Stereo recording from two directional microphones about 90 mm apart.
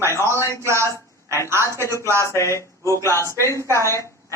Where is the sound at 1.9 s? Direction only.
30° right (ahead or behind).